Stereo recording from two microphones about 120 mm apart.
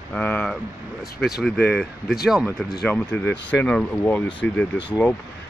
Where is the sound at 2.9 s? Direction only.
10° left (ahead or behind).